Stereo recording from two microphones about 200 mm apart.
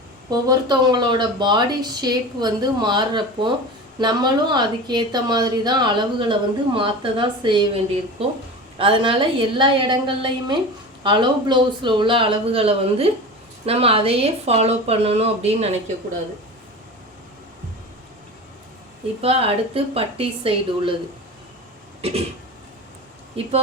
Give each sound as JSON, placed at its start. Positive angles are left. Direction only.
{"t": 0.3, "sound": "speech", "side_deg": -20}
{"t": 19.2, "sound": "speech", "side_deg": -30}
{"t": 23.4, "sound": "speech", "side_deg": -30}